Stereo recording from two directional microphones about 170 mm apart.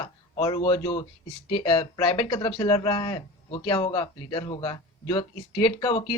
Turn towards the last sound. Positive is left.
turn(degrees=25)  # may be behind; listen again after turning